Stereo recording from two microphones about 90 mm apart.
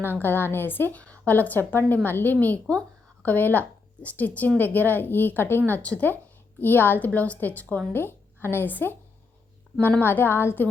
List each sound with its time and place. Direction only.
0.0 s a woman's voice: 25° left (ahead or behind)
10.0 s a woman's voice: 25° left (ahead or behind)